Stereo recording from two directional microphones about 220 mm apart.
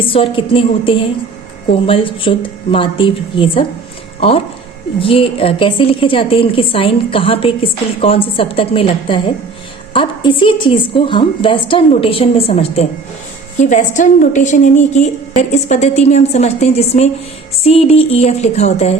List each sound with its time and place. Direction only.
0.0 s a woman's voice: 25° left (ahead or behind)